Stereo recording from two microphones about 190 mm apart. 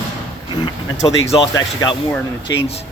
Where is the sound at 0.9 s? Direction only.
30° left (ahead or behind).